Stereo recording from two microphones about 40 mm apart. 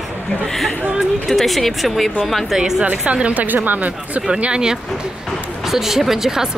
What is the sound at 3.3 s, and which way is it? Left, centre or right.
Speech, right.